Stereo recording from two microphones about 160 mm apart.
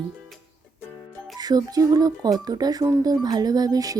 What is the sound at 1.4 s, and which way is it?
Speech, 25° right (ahead or behind).